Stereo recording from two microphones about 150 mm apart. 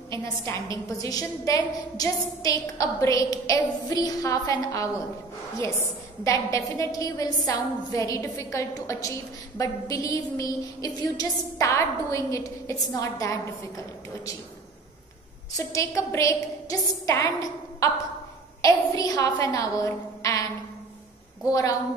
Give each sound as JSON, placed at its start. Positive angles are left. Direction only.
{"t": 0.1, "sound": "a woman's voice", "side_deg": 20}
{"t": 15.5, "sound": "a woman's voice", "side_deg": 20}
{"t": 21.5, "sound": "a woman's voice", "side_deg": 20}